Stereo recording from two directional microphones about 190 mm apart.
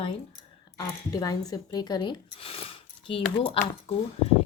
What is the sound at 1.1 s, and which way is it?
Speech, 20° left (ahead or behind).